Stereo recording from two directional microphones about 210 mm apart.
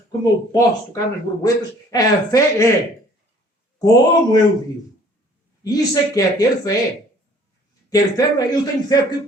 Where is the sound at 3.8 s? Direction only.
20° left (ahead or behind).